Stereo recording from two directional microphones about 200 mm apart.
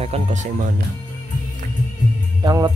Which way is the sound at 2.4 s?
20° right (ahead or behind).